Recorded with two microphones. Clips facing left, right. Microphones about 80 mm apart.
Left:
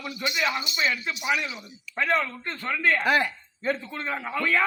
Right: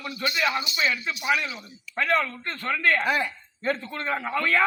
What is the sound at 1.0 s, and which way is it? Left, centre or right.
Speech, centre.